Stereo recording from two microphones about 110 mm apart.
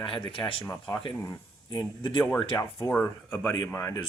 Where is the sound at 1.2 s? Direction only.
35° left (ahead or behind).